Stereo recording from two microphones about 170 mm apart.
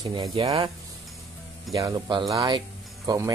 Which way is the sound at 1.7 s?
25° right (ahead or behind).